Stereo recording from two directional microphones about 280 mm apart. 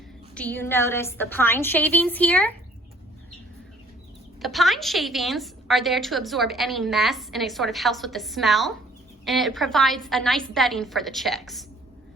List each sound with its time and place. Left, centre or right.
0.3 s a woman's voice: centre
4.4 s a woman's voice: centre